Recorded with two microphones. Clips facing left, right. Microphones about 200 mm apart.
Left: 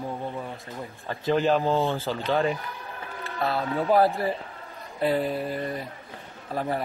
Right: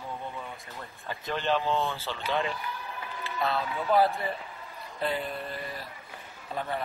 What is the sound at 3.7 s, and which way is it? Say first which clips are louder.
Speech: left 4 dB; 30° left (ahead or behind).